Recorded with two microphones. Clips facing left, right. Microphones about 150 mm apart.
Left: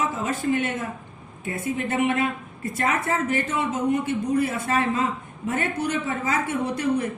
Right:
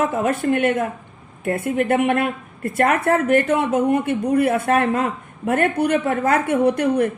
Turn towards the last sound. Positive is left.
turn(degrees=-60)  # may be behind; listen again after turning